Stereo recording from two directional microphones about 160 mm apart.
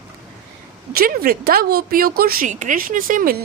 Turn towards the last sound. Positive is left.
turn(degrees=-55)  # may be behind; listen again after turning